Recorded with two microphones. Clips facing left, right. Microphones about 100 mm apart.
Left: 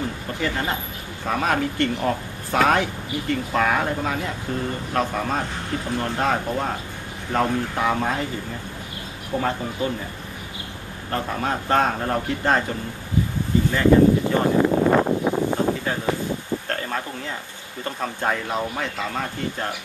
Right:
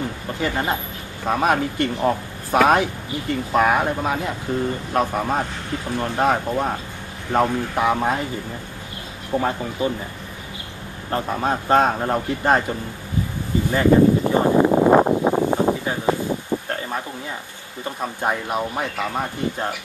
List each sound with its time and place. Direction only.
0.4 s speech: 20° right (ahead or behind)
7.3 s speech: 20° right (ahead or behind)
9.3 s speech: 20° right (ahead or behind)
11.1 s speech: 20° right (ahead or behind)
13.7 s a sound: 15° right (ahead or behind)
17.8 s speech: 15° right (ahead or behind)